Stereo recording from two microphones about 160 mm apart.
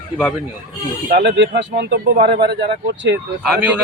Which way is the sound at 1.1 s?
90° right.